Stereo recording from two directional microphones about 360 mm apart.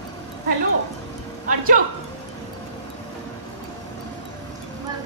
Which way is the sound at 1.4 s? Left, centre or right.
Right.